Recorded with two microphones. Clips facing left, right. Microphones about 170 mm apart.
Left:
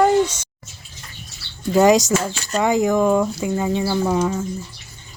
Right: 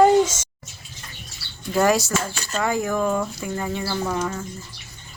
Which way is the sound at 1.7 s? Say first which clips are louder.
Left 5 dB; 15° left (ahead or behind).